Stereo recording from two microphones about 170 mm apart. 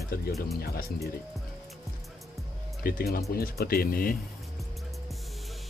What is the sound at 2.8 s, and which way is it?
Speech, 60° left (ahead or behind).